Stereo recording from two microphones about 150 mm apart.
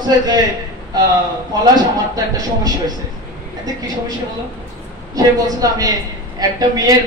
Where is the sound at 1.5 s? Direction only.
25° right (ahead or behind).